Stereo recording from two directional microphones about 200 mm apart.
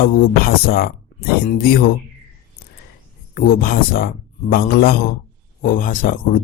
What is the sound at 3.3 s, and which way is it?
Speech, 45° left (ahead or behind).